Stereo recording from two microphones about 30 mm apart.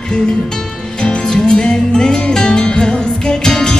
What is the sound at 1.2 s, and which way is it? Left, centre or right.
Music, left.